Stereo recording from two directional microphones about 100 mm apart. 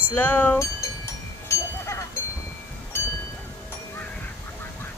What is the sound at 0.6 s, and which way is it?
Sheep, 30° left (ahead or behind).